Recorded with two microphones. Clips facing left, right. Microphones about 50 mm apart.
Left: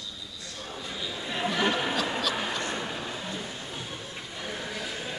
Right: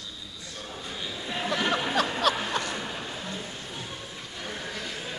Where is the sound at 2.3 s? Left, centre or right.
Right.